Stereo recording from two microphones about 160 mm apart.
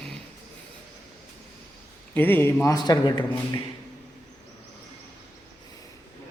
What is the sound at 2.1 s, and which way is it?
A man's voice, 10° left (ahead or behind).